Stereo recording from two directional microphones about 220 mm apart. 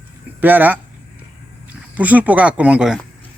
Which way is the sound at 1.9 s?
5° right (ahead or behind).